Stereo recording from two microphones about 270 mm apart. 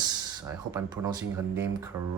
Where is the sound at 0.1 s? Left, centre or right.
Centre.